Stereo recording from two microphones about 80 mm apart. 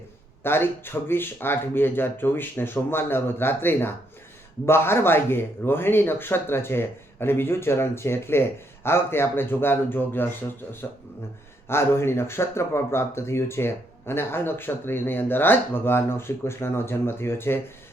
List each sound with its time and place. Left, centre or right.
0.4 s a man's voice: left